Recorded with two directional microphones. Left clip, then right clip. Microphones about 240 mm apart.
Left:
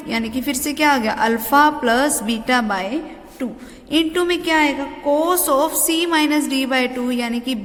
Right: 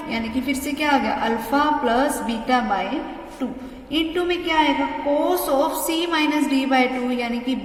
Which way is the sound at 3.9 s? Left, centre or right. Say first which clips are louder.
Left 4 dB; left.